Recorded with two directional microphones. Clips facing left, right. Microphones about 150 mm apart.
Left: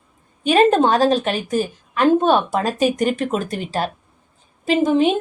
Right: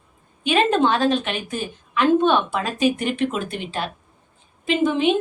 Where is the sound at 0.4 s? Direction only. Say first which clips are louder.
Left 4 dB; 40° left (ahead or behind).